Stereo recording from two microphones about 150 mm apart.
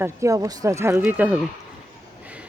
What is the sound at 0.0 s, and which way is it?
Speech, 20° right (ahead or behind).